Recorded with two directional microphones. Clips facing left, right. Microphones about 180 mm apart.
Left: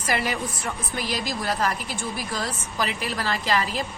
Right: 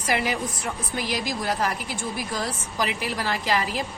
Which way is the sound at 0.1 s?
15° right (ahead or behind).